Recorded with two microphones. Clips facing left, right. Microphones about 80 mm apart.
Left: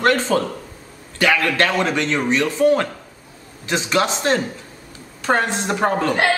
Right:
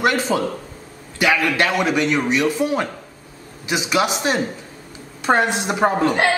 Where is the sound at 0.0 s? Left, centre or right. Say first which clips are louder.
Left 1 dB; centre.